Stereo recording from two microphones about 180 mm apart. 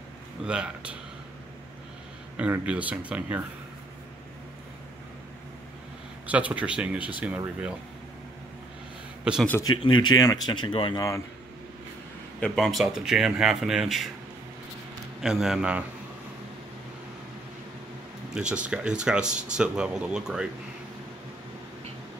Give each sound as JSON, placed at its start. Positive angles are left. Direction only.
{"t": 0.5, "sound": "speech", "side_deg": -5}
{"t": 2.3, "sound": "speech", "side_deg": -5}
{"t": 6.2, "sound": "speech", "side_deg": -5}
{"t": 9.2, "sound": "a man's voice", "side_deg": -5}
{"t": 9.5, "sound": "speech", "side_deg": 20}
{"t": 12.4, "sound": "speech", "side_deg": 5}
{"t": 15.2, "sound": "speech", "side_deg": 0}
{"t": 18.3, "sound": "speech", "side_deg": -5}